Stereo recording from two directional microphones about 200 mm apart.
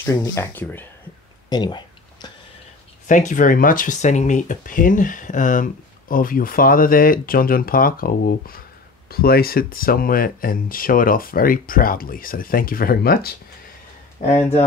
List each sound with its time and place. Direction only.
0.0 s speech: 15° left (ahead or behind)
1.5 s speech: 20° left (ahead or behind)
3.1 s speech: 40° left (ahead or behind)